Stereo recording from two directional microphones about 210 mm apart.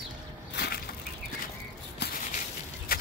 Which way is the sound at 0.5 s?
50° left (ahead or behind).